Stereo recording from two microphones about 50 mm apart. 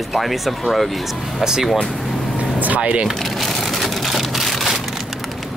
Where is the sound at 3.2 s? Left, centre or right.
Centre.